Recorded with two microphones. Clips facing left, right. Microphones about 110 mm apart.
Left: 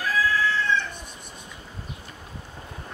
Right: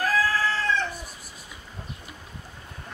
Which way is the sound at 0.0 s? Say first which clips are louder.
Even; 40° right (ahead or behind).